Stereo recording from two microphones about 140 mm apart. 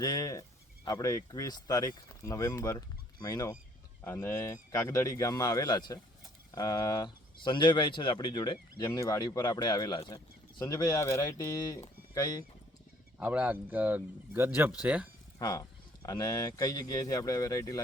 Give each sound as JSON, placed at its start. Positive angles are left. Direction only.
{"t": 0.0, "sound": "speech", "side_deg": 25}
{"t": 13.1, "sound": "speech", "side_deg": -10}
{"t": 15.4, "sound": "speech", "side_deg": 25}